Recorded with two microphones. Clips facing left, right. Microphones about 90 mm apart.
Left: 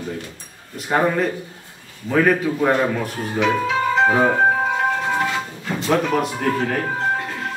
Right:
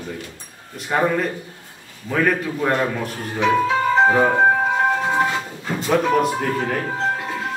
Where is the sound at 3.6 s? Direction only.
25° right (ahead or behind).